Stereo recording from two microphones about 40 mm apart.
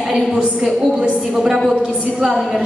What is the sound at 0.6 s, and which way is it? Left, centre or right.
Speech, centre.